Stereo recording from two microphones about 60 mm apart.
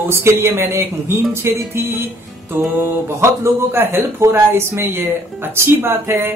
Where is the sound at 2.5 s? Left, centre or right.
Right.